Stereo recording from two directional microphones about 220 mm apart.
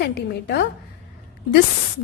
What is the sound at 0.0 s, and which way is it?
Speech, 45° left (ahead or behind).